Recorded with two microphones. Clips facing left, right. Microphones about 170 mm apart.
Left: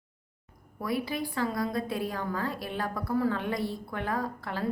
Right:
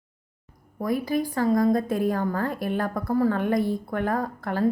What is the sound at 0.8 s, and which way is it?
A woman's voice, 45° right (ahead or behind).